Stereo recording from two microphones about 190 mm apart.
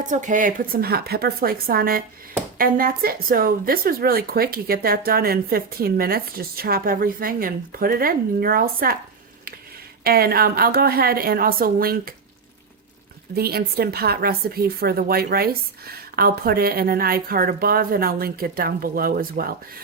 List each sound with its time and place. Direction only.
0.1 s speech: 40° right (ahead or behind)
10.0 s speech: 50° right (ahead or behind)
13.3 s speech: 55° right (ahead or behind)